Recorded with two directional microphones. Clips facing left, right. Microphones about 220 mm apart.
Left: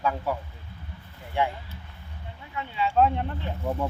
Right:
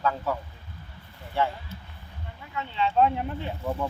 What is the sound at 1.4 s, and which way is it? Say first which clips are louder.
Speech: even; 15° left (ahead or behind).